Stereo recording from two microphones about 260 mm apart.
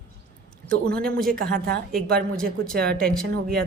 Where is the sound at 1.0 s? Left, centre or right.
Right.